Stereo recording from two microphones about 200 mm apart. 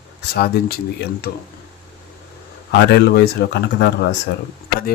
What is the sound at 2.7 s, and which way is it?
Speech, 55° left (ahead or behind).